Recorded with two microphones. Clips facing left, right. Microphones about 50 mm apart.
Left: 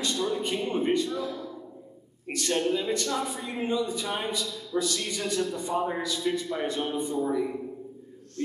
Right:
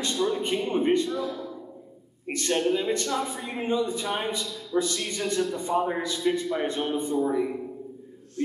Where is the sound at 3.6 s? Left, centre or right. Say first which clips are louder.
Right 2 dB; right.